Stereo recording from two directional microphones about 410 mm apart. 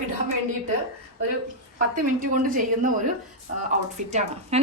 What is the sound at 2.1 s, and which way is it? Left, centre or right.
Speech, centre.